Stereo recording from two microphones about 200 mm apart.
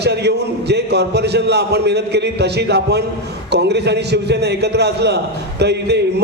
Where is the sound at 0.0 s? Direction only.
55° right (ahead or behind).